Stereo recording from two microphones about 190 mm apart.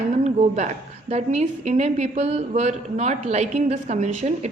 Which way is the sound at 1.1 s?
35° right (ahead or behind).